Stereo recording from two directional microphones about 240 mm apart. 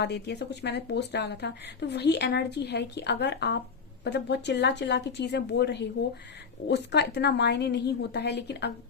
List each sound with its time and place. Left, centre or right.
0.0 s a woman's voice: left